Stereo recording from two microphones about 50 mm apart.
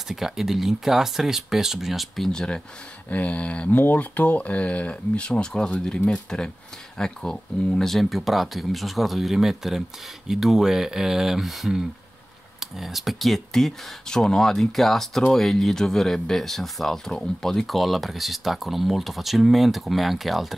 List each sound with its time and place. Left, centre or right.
0.1 s speech: centre
2.3 s speech: centre
3.7 s speech: left; by 20.5 s centre